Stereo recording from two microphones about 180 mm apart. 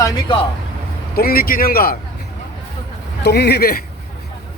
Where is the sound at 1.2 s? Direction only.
55° left (ahead or behind).